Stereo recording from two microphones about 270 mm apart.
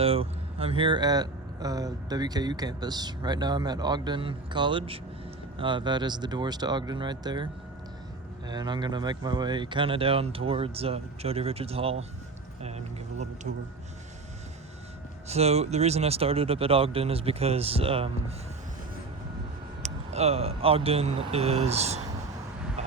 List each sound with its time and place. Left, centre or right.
0.0 s speech: right
8.4 s speech: centre
12.6 s a sound: right
15.3 s speech: right
19.8 s speech: right